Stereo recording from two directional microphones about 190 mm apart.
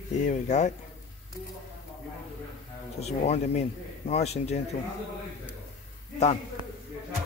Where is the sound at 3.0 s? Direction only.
35° left (ahead or behind).